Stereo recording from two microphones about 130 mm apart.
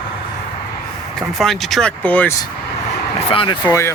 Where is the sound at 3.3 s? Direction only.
45° left (ahead or behind).